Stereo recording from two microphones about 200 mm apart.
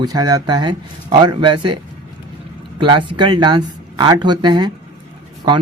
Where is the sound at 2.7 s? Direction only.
25° right (ahead or behind).